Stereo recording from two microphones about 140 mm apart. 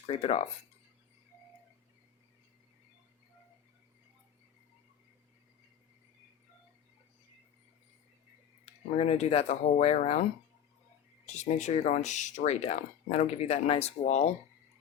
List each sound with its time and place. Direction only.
0.1 s speech: 50° left (ahead or behind)
8.6 s speech: 45° left (ahead or behind)
11.3 s speech: 55° left (ahead or behind)